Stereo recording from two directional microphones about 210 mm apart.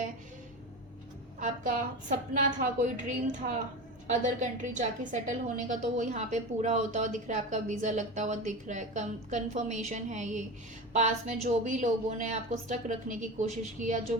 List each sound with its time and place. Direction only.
1.4 s a woman's voice: 35° right (ahead or behind)